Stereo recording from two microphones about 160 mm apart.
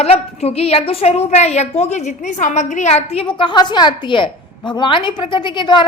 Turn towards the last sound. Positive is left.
turn(degrees=30)  # may be behind; listen again after turning